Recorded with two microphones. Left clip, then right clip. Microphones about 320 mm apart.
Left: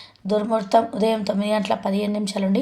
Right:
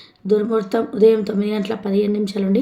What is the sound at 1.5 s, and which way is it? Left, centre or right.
A woman's voice, centre.